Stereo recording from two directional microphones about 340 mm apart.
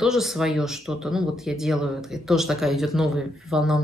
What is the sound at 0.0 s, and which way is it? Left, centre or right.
Speech, centre.